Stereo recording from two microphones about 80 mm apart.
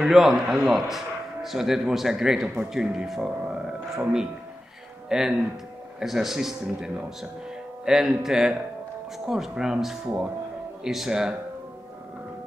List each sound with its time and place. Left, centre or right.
0.0 s a man's voice: centre